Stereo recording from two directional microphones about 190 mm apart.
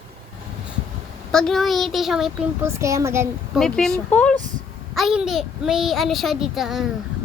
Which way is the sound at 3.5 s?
Centre (ahead or behind).